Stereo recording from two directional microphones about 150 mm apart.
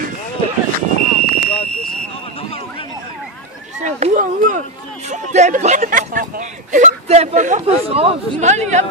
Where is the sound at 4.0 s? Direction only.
55° right (ahead or behind).